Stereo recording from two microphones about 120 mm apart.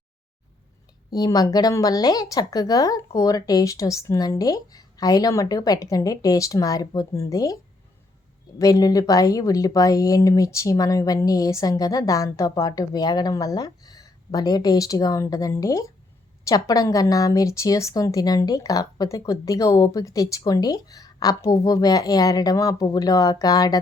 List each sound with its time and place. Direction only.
1.1 s a woman's voice: 35° left (ahead or behind)